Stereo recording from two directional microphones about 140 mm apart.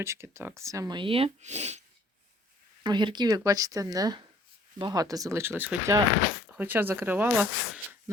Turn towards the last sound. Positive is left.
turn(degrees=-10)  # may be behind; listen again after turning